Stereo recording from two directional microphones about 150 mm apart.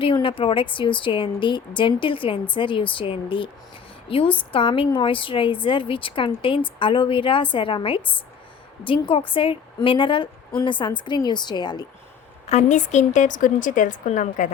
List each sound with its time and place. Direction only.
0.0 s a woman's voice: 35° left (ahead or behind)
12.5 s a woman's voice: 50° left (ahead or behind)